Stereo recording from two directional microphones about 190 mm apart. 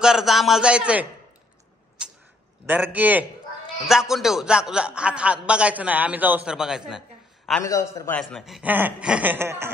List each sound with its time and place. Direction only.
0.0 s a man's voice: centre (ahead or behind)
2.6 s a man's voice: 10° right (ahead or behind)
7.6 s a man's voice: 15° left (ahead or behind)
8.2 s speech: centre (ahead or behind)